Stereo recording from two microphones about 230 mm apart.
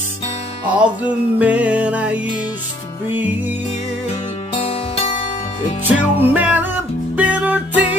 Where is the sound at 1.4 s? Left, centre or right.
Centre.